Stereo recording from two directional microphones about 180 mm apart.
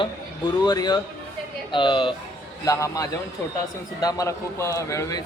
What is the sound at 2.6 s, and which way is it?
A man's voice, 15° left (ahead or behind).